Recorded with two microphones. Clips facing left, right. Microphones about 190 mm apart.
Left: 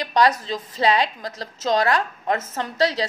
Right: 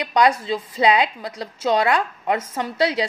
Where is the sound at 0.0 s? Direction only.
10° right (ahead or behind).